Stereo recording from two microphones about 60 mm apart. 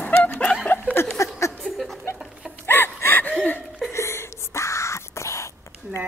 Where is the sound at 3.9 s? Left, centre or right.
Left.